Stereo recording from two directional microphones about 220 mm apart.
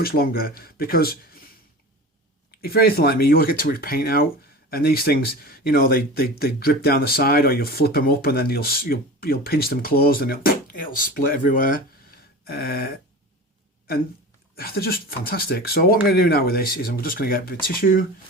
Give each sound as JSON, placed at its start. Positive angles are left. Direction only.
{"t": 0.0, "sound": "speech", "side_deg": 45}
{"t": 2.5, "sound": "speech", "side_deg": 45}
{"t": 14.5, "sound": "speech", "side_deg": 45}